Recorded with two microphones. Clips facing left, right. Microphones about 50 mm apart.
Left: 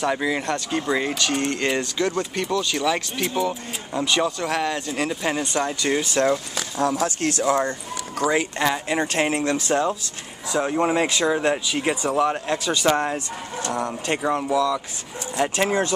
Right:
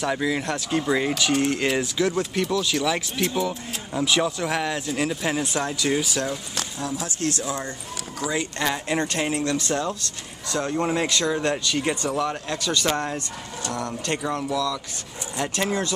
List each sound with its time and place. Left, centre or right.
0.0 s speech: centre
6.8 s speech: left
8.2 s speech: left
8.5 s speech: centre
9.0 s speech: left